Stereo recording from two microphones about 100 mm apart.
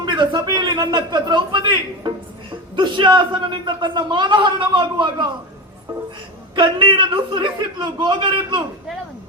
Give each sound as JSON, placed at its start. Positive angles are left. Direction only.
{"t": 0.0, "sound": "a sound", "side_deg": -50}
{"t": 0.4, "sound": "a man's voice", "side_deg": -50}
{"t": 6.6, "sound": "a man's voice", "side_deg": -55}